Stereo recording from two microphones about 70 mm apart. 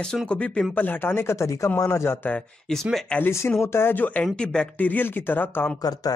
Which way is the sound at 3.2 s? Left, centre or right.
Left.